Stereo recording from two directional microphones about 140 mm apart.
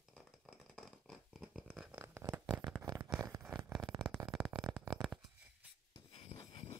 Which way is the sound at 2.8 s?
30° right (ahead or behind).